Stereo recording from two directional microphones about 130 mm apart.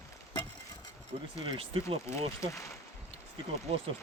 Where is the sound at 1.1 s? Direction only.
45° right (ahead or behind).